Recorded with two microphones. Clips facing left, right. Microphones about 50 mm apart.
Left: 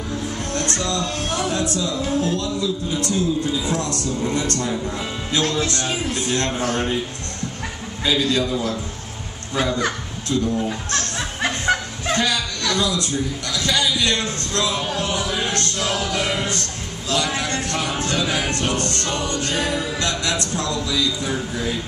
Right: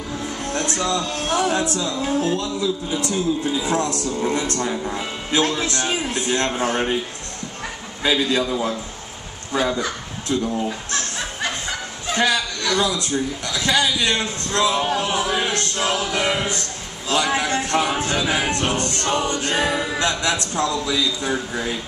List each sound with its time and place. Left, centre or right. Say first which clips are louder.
0.7 s music: right 1 dB; centre
6.6 s a man's voice: right 1 dB; centre
8.0 s music: even; centre
9.5 s a child's voice: even; centre
12.1 s chuckle: right 1 dB; centre
13.5 s music: right 2 dB; centre